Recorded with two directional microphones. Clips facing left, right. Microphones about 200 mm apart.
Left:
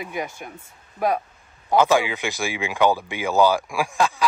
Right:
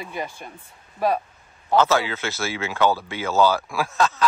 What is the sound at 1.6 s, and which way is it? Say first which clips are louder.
Speech: left 1 dB; 15° left (ahead or behind).